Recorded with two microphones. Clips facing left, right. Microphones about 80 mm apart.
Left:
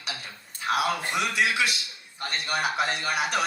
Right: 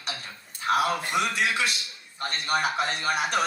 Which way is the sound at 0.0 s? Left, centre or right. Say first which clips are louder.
Right 1 dB; right.